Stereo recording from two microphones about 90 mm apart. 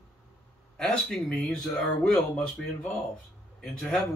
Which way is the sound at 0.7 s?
5° left (ahead or behind).